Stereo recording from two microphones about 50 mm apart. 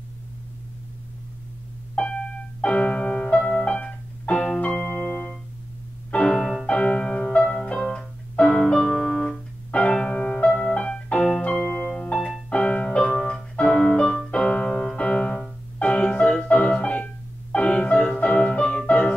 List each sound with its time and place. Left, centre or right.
2.6 s piano: left
3.4 s music: left
6.1 s piano: centre
6.6 s music: left
8.5 s piano: centre
9.7 s music: left
14.3 s keyboard: left
14.7 s piano: centre
15.8 s music: left